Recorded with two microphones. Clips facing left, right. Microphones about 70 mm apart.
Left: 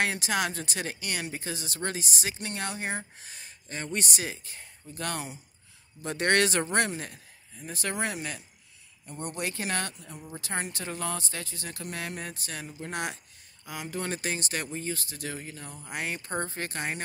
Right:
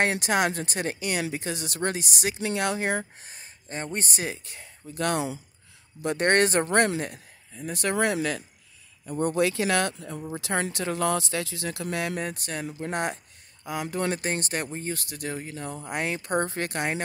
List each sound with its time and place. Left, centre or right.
0.0 s speech: right
2.3 s speech: right
3.2 s speech: right
4.2 s speech: right
6.0 s speech: right
7.5 s speech: right
9.4 s speech: right